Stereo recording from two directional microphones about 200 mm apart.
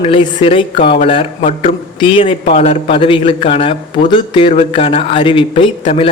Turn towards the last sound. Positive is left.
turn(degrees=25)  # may be behind; listen again after turning